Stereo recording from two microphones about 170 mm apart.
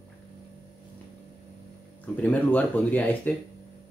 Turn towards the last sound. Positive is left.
turn(degrees=10)  # may be behind; listen again after turning